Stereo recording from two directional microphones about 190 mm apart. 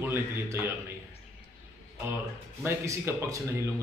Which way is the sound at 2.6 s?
15° right (ahead or behind).